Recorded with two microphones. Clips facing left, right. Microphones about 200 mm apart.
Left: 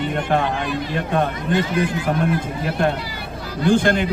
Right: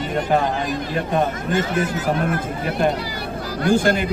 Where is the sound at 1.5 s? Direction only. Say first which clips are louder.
Left 1 dB; 45° right (ahead or behind).